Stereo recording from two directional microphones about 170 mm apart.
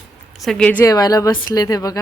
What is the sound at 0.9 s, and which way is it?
Speech, 20° left (ahead or behind).